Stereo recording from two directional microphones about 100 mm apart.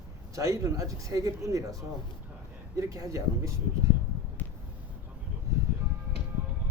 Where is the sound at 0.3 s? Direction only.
30° right (ahead or behind).